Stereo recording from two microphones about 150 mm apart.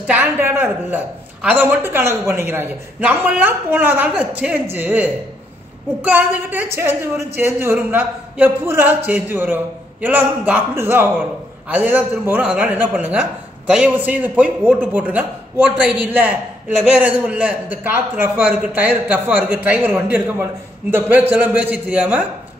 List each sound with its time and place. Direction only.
0.0 s a man's voice: 10° right (ahead or behind)